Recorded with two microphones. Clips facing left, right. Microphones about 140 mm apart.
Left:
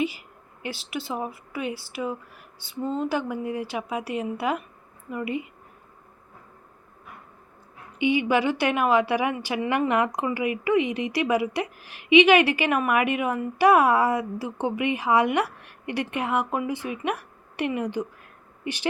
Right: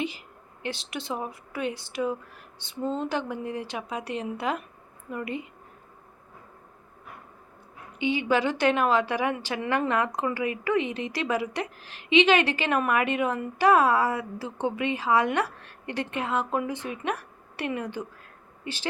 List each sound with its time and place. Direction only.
0.0 s a woman's voice: 10° left (ahead or behind)
7.9 s a woman's voice: 15° left (ahead or behind)